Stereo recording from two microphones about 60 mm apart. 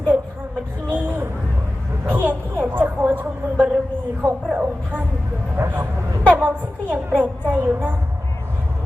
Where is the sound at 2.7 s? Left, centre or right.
Right.